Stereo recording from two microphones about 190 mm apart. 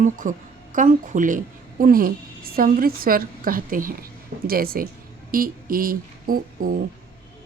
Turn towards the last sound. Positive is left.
turn(degrees=-50)  # may be behind; listen again after turning